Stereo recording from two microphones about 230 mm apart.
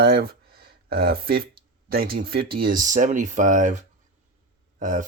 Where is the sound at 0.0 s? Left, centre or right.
Right.